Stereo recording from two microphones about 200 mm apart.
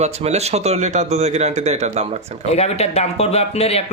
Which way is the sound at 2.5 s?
30° left (ahead or behind).